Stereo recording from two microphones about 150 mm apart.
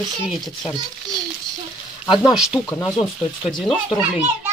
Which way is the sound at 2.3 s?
5° right (ahead or behind).